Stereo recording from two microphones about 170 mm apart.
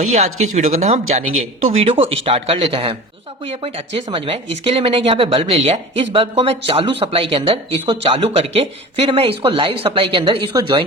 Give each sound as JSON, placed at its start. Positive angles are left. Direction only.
{"t": 0.0, "sound": "speech", "side_deg": -45}